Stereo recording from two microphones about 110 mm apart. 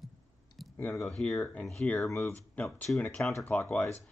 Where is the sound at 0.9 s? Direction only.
5° left (ahead or behind).